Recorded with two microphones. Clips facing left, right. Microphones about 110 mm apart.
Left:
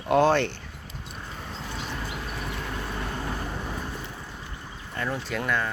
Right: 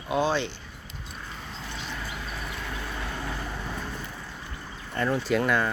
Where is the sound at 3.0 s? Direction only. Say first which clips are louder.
Left 2 dB; 30° left (ahead or behind).